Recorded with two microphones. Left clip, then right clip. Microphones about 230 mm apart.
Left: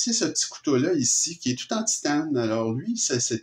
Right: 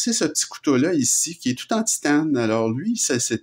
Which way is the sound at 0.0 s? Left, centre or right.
Right.